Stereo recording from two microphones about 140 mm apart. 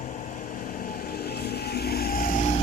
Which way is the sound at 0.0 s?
60° left (ahead or behind).